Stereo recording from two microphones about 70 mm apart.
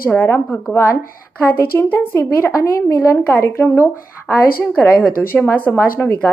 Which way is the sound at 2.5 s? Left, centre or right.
Left.